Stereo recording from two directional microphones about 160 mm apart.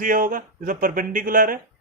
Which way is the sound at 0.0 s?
60° right (ahead or behind).